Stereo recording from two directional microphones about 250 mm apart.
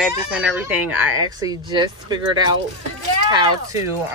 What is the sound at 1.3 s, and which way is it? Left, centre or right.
Speech, centre.